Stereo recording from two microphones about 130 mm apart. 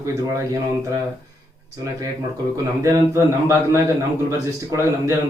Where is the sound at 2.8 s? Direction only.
25° right (ahead or behind).